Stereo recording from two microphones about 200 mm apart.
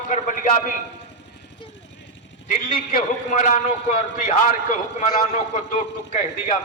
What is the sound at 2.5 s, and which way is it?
A man's voice, 40° left (ahead or behind).